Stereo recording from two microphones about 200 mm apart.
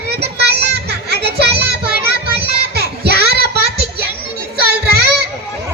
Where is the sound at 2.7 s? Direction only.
55° right (ahead or behind).